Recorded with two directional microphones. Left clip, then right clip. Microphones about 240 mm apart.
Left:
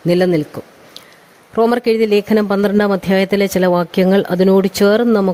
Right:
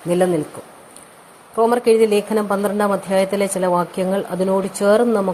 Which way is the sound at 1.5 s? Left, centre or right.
Left.